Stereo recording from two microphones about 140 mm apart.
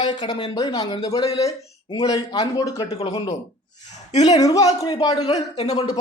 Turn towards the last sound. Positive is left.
turn(degrees=50)  # may be behind; listen again after turning